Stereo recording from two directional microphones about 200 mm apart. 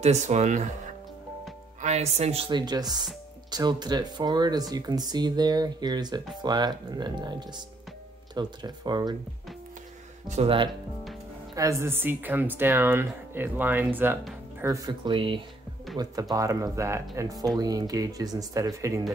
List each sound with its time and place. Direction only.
0.0 s speech: 35° right (ahead or behind)
1.8 s speech: 35° right (ahead or behind)
10.2 s speech: 35° right (ahead or behind)
11.5 s speech: 15° right (ahead or behind)